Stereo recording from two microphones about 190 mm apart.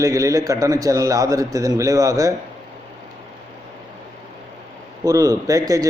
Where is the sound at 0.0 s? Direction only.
15° right (ahead or behind).